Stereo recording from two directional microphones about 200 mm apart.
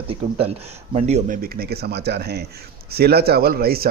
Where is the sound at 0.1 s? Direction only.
30° right (ahead or behind).